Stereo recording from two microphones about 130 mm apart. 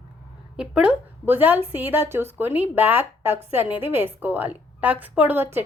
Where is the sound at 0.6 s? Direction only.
10° right (ahead or behind).